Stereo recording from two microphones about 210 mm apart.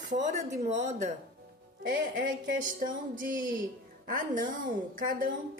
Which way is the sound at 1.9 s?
55° right (ahead or behind).